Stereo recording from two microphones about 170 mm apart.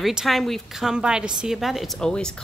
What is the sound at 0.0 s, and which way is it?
A woman's voice, centre (ahead or behind).